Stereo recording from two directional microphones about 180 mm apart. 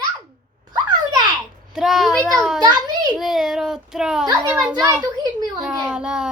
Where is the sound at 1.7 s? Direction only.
Centre (ahead or behind).